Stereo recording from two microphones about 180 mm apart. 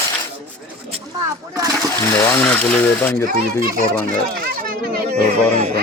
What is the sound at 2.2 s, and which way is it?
Speech, 10° left (ahead or behind).